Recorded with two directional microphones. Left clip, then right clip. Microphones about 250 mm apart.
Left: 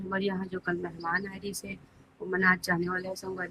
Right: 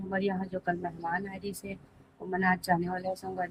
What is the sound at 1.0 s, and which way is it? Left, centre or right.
Speech, left.